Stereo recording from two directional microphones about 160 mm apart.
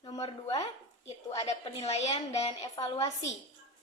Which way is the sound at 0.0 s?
40° left (ahead or behind).